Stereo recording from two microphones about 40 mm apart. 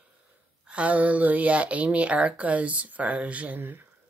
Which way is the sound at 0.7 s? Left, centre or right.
Right.